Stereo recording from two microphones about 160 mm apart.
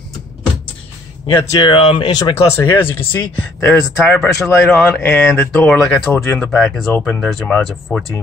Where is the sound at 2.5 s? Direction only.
15° left (ahead or behind).